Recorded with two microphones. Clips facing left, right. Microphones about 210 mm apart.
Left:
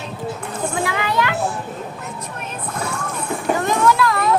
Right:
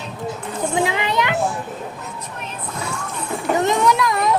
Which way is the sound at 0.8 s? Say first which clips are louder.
Right 1 dB; 20° right (ahead or behind).